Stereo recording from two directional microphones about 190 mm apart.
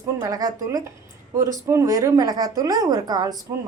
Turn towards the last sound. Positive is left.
turn(degrees=-20)  # may be behind; listen again after turning